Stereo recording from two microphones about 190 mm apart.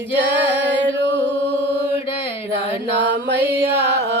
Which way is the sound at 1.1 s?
25° left (ahead or behind).